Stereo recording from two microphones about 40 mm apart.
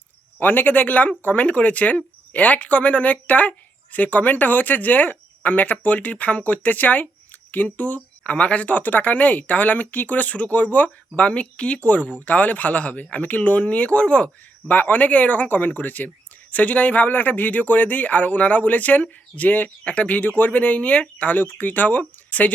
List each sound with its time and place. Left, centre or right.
0.3 s speech: left
8.7 s speech: left
14.7 s speech: left